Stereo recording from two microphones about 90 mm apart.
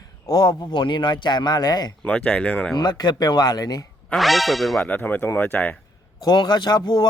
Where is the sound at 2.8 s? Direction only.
50° left (ahead or behind).